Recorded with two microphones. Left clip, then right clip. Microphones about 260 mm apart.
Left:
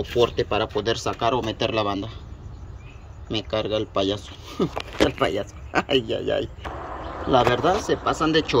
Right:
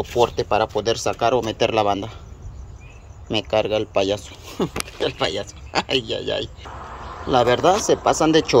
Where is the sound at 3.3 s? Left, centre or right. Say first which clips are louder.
Right 5 dB; centre.